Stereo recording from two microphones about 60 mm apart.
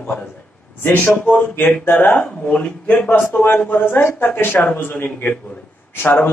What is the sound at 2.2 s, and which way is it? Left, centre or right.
Speech, centre.